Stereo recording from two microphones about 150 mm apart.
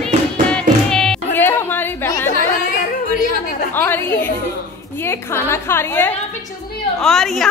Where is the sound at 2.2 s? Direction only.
65° left (ahead or behind).